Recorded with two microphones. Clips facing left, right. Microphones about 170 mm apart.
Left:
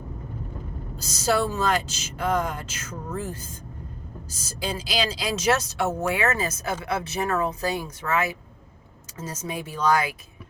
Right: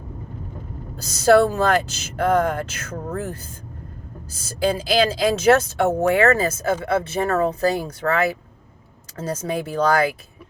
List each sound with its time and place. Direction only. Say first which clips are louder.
1.2 s speech: right 8 dB; 60° right (ahead or behind)
4.8 s speech: right 7 dB; 55° right (ahead or behind)
5.9 s speech: right 9 dB; 35° right (ahead or behind)
6.1 s speech: right 8 dB; 55° right (ahead or behind)
9.1 s speech: right 7 dB; 60° right (ahead or behind)